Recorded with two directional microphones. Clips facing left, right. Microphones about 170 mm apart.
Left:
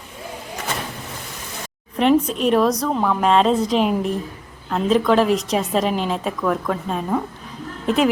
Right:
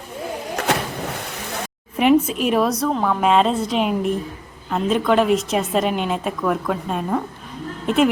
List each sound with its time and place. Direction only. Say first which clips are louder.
0.5 s vehicle: right 6 dB; 70° right (ahead or behind)
2.2 s a woman's voice: left 2 dB; 5° right (ahead or behind)